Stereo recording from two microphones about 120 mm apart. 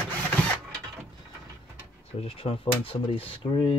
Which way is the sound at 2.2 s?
50° left (ahead or behind).